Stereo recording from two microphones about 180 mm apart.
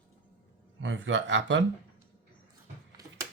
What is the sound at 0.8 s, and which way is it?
Speech, 90° right.